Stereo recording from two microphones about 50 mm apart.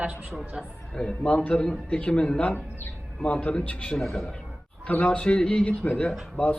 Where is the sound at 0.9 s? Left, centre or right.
Centre.